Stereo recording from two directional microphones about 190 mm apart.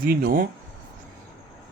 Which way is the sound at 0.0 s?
50° right (ahead or behind).